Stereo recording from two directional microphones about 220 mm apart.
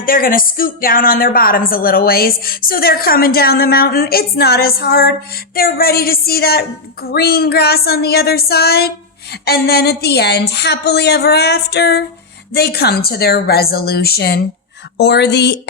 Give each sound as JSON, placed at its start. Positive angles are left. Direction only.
{"t": 0.0, "sound": "a woman's voice", "side_deg": 40}